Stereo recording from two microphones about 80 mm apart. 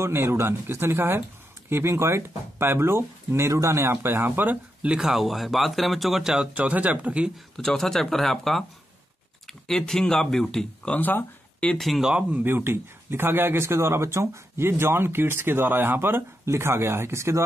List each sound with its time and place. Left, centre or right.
0.0 s speech: right
4.9 s speech: centre
7.5 s speech: centre
11.0 s speech: left
11.7 s speech: centre
12.1 s speech: centre
12.4 s speech: right